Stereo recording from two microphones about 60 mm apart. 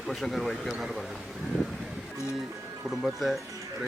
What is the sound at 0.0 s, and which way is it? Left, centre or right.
Speech, centre.